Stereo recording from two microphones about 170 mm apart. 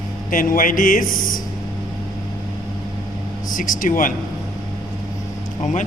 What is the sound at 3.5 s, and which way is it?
Speech, 50° left (ahead or behind).